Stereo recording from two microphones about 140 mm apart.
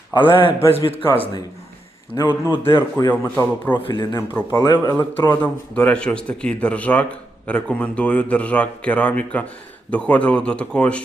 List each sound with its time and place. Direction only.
0.1 s a man's voice: 35° left (ahead or behind)
2.1 s a man's voice: 30° left (ahead or behind)
2.6 s a man's voice: 15° left (ahead or behind)
3.8 s a man's voice: 30° left (ahead or behind)
4.9 s a man's voice: 15° left (ahead or behind)